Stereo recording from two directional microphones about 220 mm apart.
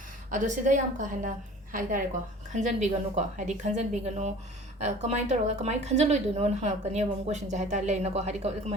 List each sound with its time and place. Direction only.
0.3 s a woman's voice: 35° right (ahead or behind)